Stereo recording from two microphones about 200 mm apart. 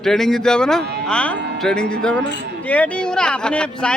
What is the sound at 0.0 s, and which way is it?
Speech, centre (ahead or behind).